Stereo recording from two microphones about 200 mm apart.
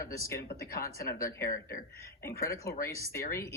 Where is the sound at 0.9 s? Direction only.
45° left (ahead or behind).